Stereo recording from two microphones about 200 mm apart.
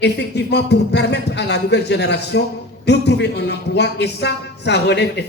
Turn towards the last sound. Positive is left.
turn(degrees=55)  # may be behind; listen again after turning